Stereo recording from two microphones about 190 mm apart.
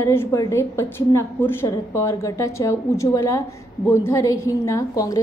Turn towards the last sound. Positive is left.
turn(degrees=15)  # may be behind; listen again after turning